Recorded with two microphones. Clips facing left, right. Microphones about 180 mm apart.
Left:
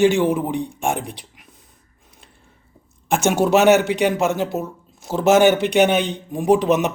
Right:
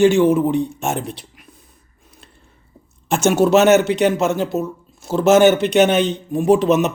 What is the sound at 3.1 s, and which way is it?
Speech, 15° left (ahead or behind).